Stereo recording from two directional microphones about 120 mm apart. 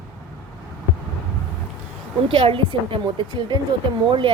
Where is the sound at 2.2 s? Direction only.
50° right (ahead or behind).